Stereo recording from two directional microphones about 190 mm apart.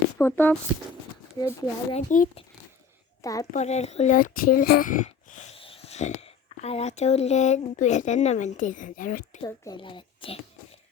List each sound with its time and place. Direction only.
0.2 s a child's voice: 10° left (ahead or behind)
1.9 s a child's voice: 40° left (ahead or behind)
3.2 s a woman's voice: 15° left (ahead or behind)
3.5 s speech: 35° left (ahead or behind)
9.4 s a child's voice: 20° left (ahead or behind)